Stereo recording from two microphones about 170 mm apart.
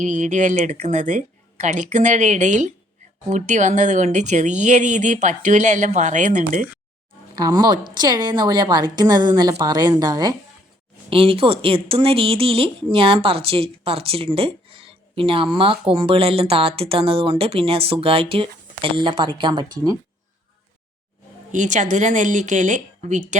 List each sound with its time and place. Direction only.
0.0 s speech: 45° right (ahead or behind)
7.3 s a woman's voice: 25° right (ahead or behind)
11.1 s a woman's voice: 35° right (ahead or behind)
21.5 s speech: 45° right (ahead or behind)